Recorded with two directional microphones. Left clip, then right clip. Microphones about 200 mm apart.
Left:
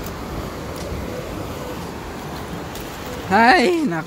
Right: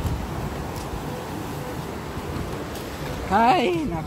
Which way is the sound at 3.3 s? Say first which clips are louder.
Left 5 dB; 25° left (ahead or behind).